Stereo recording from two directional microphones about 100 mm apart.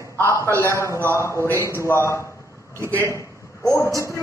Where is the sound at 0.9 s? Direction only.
25° right (ahead or behind).